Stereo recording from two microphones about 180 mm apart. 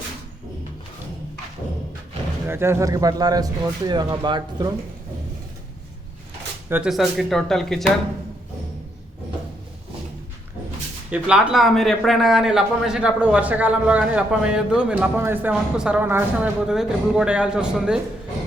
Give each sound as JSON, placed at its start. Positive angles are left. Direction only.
{"t": 2.5, "sound": "speech", "side_deg": -15}
{"t": 6.7, "sound": "a man's voice", "side_deg": -5}
{"t": 11.1, "sound": "a man's voice", "side_deg": -5}